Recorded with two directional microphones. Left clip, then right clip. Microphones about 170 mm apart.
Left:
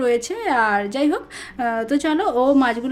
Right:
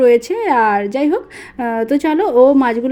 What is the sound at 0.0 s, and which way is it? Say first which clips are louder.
A woman's voice: right 8 dB; 15° right (ahead or behind).